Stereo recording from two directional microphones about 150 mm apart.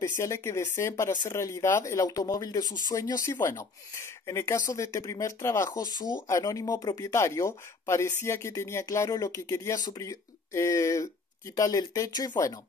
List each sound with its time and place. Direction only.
0.2 s speech: 20° left (ahead or behind)